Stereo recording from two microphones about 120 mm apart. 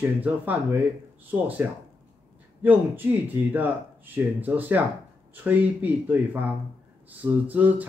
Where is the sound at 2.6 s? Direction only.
15° right (ahead or behind).